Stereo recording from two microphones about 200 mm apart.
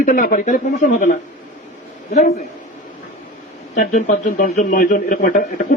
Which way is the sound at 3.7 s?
40° left (ahead or behind).